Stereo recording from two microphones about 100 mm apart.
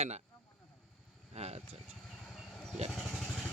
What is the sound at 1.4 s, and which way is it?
Speech, 90° right.